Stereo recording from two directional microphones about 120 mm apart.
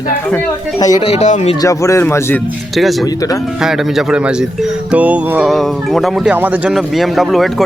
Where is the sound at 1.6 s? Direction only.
25° left (ahead or behind).